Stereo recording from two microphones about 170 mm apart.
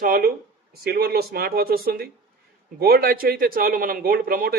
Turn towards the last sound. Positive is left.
turn(degrees=-60)  # may be behind; listen again after turning